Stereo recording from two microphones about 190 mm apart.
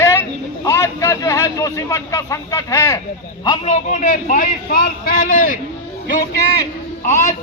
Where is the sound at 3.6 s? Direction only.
40° left (ahead or behind).